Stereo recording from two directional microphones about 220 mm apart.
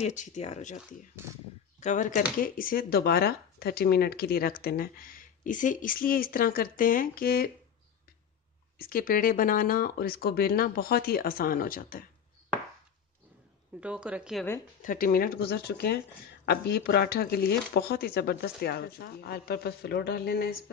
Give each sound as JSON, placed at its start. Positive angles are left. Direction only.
{"t": 0.0, "sound": "speech", "side_deg": 35}
{"t": 1.8, "sound": "speech", "side_deg": 35}
{"t": 8.7, "sound": "speech", "side_deg": 40}
{"t": 13.7, "sound": "speech", "side_deg": -5}
{"t": 14.8, "sound": "speech", "side_deg": 40}